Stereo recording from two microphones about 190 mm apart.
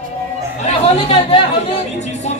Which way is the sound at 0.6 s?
30° left (ahead or behind).